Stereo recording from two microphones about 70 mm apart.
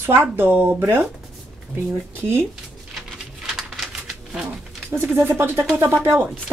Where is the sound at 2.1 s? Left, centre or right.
Right.